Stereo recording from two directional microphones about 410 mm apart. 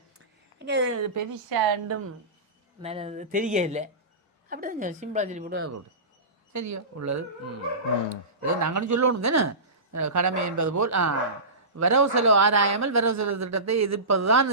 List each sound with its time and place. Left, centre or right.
0.6 s a man's voice: right
1.5 s a woman's voice: right
2.8 s a woman's voice: centre
6.5 s a man's voice: right
8.4 s a man's voice: right